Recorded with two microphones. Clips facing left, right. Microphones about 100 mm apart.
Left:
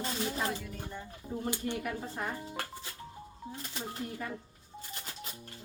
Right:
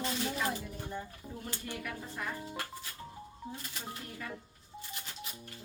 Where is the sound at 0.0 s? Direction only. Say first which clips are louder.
Even; 30° left (ahead or behind).